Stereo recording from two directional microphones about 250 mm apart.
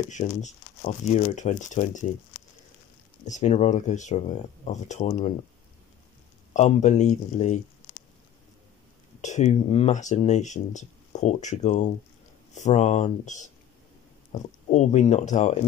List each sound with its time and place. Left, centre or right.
0.1 s speech: left
3.3 s speech: left
6.5 s speech: left
9.2 s speech: left